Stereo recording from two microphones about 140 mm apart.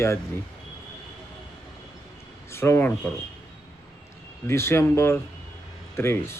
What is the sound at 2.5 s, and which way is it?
Speech, 15° left (ahead or behind).